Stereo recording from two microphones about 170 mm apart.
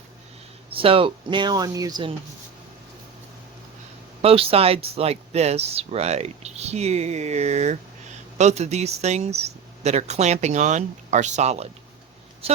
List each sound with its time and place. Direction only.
0.7 s speech: 30° right (ahead or behind)
4.2 s speech: 35° right (ahead or behind)